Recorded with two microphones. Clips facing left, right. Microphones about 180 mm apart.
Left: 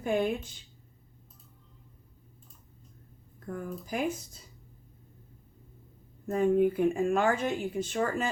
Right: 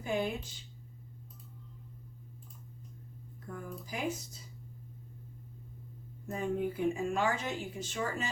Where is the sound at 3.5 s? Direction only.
55° left (ahead or behind).